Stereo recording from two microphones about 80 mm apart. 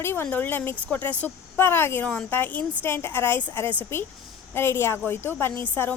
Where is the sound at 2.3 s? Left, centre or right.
Left.